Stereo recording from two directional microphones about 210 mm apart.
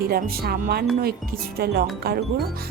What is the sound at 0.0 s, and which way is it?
Speech, 45° right (ahead or behind).